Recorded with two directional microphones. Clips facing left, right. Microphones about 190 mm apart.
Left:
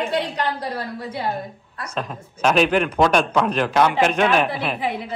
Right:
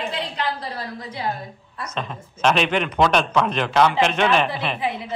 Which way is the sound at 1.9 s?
5° left (ahead or behind).